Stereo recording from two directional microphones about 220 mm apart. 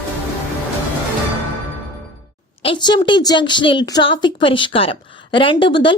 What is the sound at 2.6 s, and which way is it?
A woman's voice, 20° left (ahead or behind).